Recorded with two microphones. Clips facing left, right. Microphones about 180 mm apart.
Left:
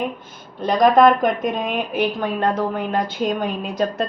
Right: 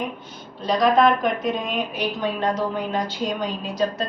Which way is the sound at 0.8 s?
50° left (ahead or behind).